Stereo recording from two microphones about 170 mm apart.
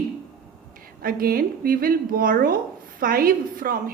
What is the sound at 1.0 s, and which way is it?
A woman's voice, 60° right (ahead or behind).